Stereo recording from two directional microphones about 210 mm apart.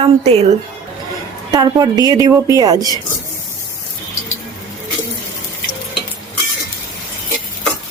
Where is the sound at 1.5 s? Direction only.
15° right (ahead or behind).